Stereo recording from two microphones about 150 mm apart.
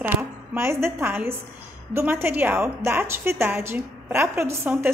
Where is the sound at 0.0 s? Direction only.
15° right (ahead or behind).